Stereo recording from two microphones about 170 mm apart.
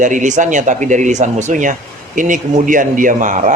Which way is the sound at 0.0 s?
50° right (ahead or behind).